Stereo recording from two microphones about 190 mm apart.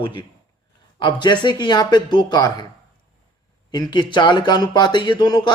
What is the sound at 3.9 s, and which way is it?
Speech, 25° left (ahead or behind).